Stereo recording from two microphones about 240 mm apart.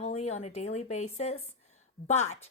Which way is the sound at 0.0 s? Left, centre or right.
Left.